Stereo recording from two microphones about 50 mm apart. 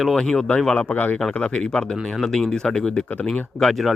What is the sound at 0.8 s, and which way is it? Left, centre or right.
Speech, left.